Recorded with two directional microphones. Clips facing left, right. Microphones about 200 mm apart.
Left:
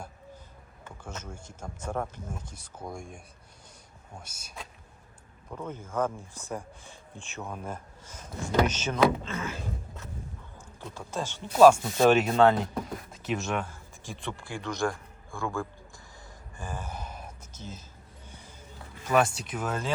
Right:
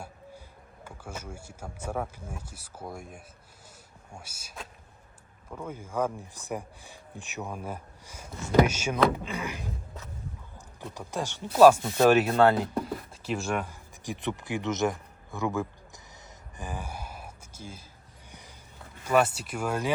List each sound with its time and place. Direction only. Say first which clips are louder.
0.9 s speech: right 1 dB; 10° right (ahead or behind)
10.8 s speech: right 1 dB; 15° right (ahead or behind)
13.7 s speech: right 5 dB; 15° right (ahead or behind)
16.6 s a sound: even; 15° right (ahead or behind)
19.0 s speech: right 1 dB; 5° right (ahead or behind)